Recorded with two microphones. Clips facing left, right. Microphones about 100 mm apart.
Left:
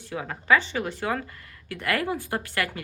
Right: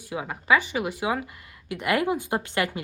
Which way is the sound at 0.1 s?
15° right (ahead or behind).